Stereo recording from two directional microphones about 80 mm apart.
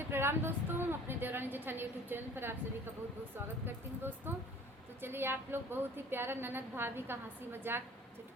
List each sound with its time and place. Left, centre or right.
0.1 s a woman's voice: right
4.3 s a woman's voice: right